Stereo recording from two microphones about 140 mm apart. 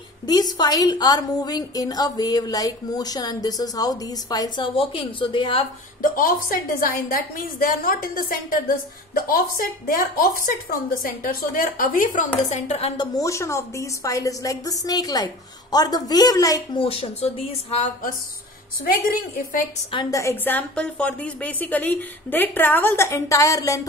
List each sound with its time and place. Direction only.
0.3 s a woman's voice: 30° left (ahead or behind)
4.7 s a woman's voice: 40° left (ahead or behind)
6.1 s a woman's voice: 85° left
12.4 s speech: 45° left (ahead or behind)
12.9 s a woman's voice: 30° left (ahead or behind)
16.7 s speech: 40° left (ahead or behind)
19.0 s a woman's voice: 90° left
20.1 s speech: 20° left (ahead or behind)